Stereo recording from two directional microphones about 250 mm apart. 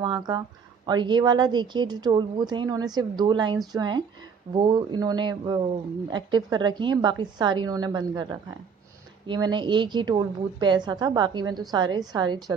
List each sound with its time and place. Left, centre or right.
0.0 s a woman's voice: centre